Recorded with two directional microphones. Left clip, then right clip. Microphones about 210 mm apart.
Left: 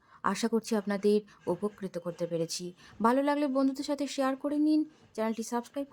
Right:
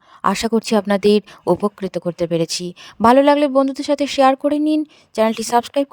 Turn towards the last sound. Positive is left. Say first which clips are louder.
# right 18 dB
turn(degrees=-45)  # may be behind; listen again after turning